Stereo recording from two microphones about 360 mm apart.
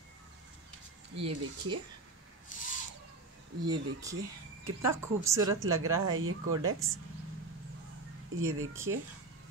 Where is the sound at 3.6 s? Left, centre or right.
Centre.